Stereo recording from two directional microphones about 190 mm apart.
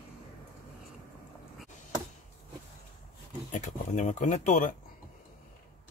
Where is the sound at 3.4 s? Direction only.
40° left (ahead or behind).